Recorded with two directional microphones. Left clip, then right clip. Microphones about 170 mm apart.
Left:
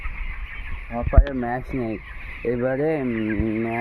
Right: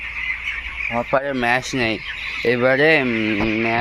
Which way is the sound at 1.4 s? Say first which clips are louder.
Right 8 dB; 10° right (ahead or behind).